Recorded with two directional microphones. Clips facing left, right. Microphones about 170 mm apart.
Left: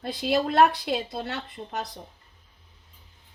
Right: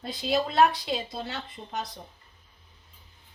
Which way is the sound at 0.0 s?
60° left (ahead or behind).